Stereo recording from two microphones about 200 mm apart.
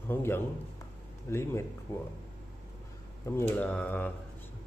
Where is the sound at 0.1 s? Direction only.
10° left (ahead or behind).